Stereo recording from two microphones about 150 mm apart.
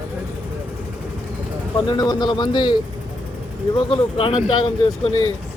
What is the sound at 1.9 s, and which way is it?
Speech, 30° left (ahead or behind).